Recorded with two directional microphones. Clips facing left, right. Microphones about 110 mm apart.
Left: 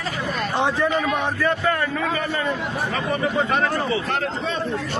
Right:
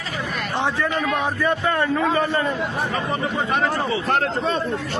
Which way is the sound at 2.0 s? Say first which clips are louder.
Right 4 dB; 25° right (ahead or behind).